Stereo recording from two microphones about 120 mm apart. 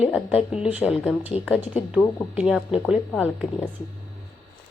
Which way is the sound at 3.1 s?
10° left (ahead or behind).